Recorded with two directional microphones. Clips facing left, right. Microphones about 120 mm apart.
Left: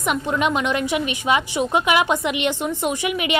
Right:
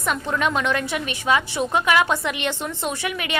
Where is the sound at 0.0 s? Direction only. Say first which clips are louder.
Left 2 dB; 15° left (ahead or behind).